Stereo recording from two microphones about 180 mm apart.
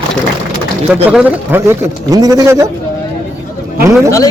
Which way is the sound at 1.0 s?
10° right (ahead or behind).